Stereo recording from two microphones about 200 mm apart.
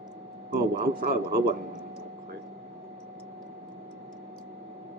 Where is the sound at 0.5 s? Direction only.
50° right (ahead or behind).